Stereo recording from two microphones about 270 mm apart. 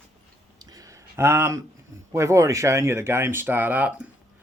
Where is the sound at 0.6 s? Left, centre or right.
Centre.